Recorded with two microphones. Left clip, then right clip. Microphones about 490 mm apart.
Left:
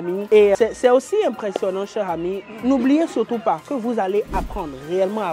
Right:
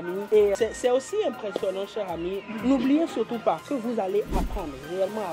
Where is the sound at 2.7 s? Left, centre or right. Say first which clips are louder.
Left 6 dB; left.